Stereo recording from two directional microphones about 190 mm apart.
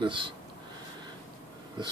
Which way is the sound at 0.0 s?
25° right (ahead or behind).